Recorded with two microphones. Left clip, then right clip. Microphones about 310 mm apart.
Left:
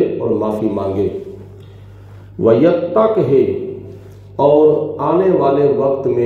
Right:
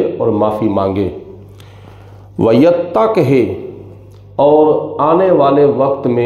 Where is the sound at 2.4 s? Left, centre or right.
Right.